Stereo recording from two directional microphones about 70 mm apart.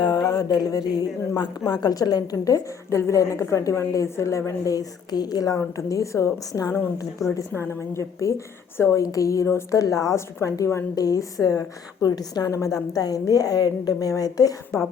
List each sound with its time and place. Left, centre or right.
0.0 s a sound: left
1.4 s a woman's voice: left
3.0 s a woman's voice: left
7.2 s a woman's voice: centre
7.5 s a woman's voice: left
7.9 s a woman's voice: left
9.8 s a woman's voice: left
10.9 s a woman's voice: left
12.0 s a woman's voice: left
12.5 s a woman's voice: left